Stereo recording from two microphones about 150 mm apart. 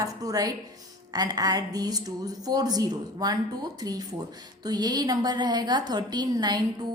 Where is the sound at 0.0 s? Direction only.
25° right (ahead or behind).